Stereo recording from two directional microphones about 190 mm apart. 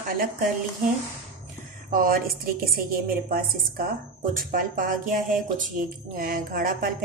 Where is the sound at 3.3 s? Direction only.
50° right (ahead or behind).